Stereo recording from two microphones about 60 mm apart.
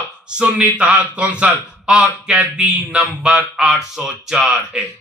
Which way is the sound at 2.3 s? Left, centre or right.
Centre.